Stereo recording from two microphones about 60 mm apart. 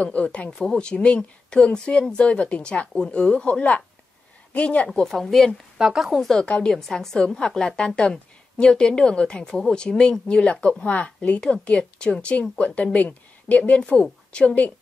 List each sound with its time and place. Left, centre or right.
0.0 s a woman's voice: left
5.0 s speech: centre
5.8 s a woman's voice: centre
6.4 s a woman's voice: centre